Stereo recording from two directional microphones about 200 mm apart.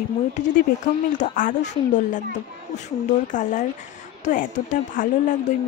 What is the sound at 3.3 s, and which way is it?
Speech, 40° left (ahead or behind).